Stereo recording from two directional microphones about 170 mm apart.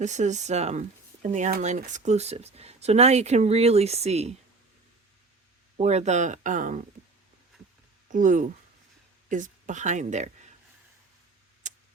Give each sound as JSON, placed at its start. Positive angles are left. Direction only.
{"t": 0.0, "sound": "speech", "side_deg": -45}
{"t": 5.7, "sound": "speech", "side_deg": -40}
{"t": 8.0, "sound": "speech", "side_deg": -50}
{"t": 11.6, "sound": "a sound", "side_deg": -45}